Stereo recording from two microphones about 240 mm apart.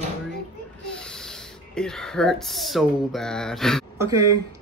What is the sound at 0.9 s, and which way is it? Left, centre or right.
Speech, centre.